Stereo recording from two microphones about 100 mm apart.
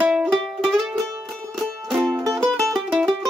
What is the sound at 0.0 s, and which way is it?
Music, 5° right (ahead or behind).